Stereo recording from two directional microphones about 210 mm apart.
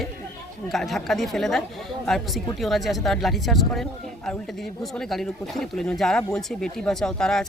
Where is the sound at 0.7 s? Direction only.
Centre (ahead or behind).